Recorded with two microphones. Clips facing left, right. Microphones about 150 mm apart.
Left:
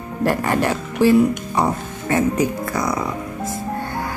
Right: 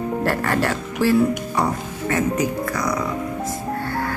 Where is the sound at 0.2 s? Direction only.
15° left (ahead or behind).